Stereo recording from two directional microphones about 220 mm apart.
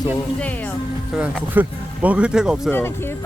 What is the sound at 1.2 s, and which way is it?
Speech, 5° right (ahead or behind).